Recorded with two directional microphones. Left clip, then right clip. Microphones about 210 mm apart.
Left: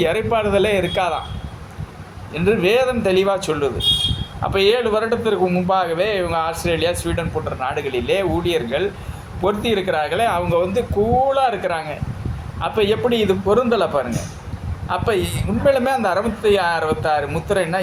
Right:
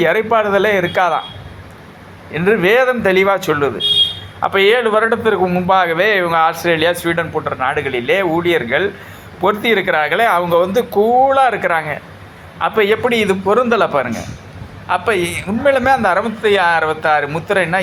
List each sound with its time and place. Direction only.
0.0 s a man's voice: 10° right (ahead or behind)
2.3 s a man's voice: 10° right (ahead or behind)